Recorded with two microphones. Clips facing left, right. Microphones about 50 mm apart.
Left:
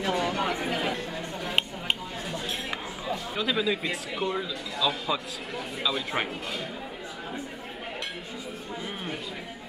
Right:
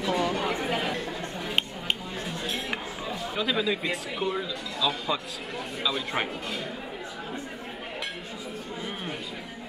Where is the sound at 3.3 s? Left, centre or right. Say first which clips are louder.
Right 1 dB; centre.